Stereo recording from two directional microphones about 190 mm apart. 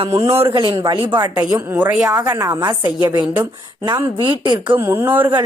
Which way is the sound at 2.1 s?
15° right (ahead or behind).